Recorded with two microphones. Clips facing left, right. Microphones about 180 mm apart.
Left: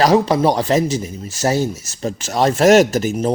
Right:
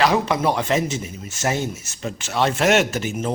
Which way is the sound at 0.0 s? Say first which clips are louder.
Left 5 dB; 35° left (ahead or behind).